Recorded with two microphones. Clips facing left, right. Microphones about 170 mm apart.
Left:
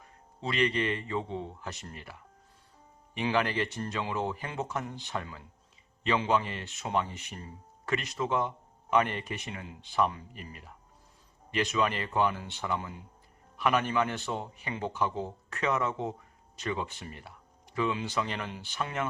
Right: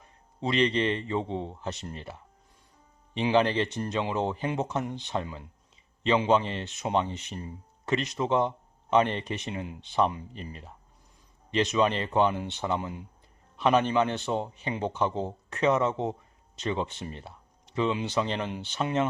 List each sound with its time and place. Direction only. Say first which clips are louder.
0.0 s speech: right 5 dB; 20° right (ahead or behind)